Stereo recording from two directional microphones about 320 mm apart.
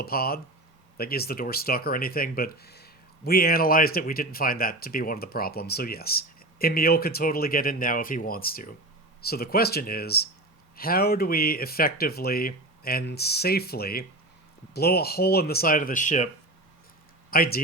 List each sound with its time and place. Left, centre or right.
0.0 s speech: left
17.3 s speech: left